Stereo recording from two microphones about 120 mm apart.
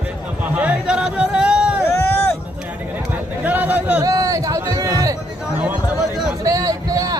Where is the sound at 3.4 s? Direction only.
15° right (ahead or behind).